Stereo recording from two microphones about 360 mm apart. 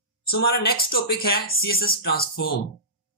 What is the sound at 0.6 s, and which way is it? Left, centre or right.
Speech, left.